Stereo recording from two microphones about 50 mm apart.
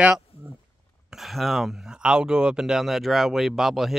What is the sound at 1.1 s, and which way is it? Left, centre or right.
Speech, centre.